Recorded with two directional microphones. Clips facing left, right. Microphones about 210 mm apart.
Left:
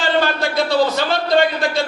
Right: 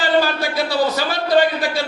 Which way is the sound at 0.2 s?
5° right (ahead or behind).